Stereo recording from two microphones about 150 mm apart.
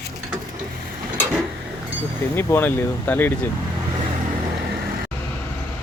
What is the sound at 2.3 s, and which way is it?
Speech, 15° left (ahead or behind).